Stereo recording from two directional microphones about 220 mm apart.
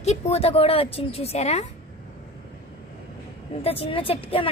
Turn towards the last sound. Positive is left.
turn(degrees=25)  # may be behind; listen again after turning